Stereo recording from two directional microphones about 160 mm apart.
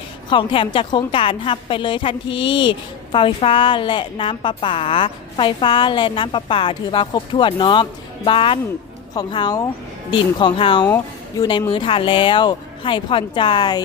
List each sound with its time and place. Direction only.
0.3 s a woman's voice: 30° left (ahead or behind)
10.8 s speech: 15° left (ahead or behind)
11.7 s a woman's voice: 35° left (ahead or behind)